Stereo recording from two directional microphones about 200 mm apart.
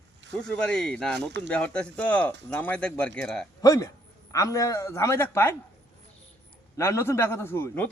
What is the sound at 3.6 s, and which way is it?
Speech, 15° left (ahead or behind).